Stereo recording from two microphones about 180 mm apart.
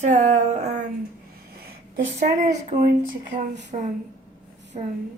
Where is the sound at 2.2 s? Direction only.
40° right (ahead or behind).